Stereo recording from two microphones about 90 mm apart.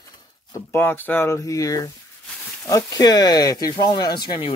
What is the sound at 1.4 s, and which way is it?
Speech, 40° left (ahead or behind).